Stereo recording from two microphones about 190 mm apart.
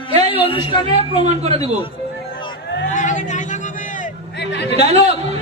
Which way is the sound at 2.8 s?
40° left (ahead or behind).